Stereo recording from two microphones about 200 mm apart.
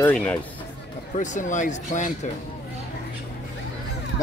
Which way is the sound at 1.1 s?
40° left (ahead or behind).